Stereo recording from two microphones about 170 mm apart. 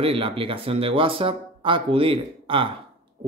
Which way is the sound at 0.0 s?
30° right (ahead or behind).